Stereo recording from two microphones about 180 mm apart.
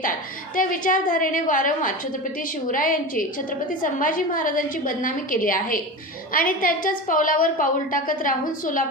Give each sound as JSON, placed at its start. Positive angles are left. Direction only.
{"t": 0.5, "sound": "a woman's voice", "side_deg": 50}